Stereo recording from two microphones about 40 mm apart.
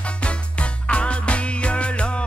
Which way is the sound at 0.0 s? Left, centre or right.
Left.